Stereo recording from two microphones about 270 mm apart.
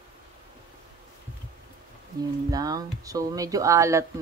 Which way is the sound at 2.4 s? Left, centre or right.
Centre.